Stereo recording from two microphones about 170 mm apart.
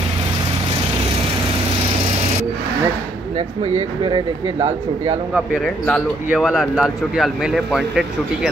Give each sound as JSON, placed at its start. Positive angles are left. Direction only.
{"t": 3.3, "sound": "speech", "side_deg": -35}
{"t": 5.3, "sound": "speech", "side_deg": 0}